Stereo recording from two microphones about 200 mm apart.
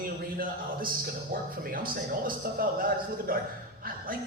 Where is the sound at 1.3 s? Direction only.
45° right (ahead or behind).